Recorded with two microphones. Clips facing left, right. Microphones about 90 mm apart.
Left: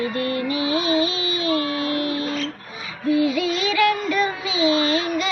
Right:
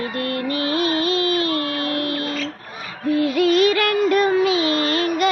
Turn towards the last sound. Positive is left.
turn(degrees=-50)  # may be behind; listen again after turning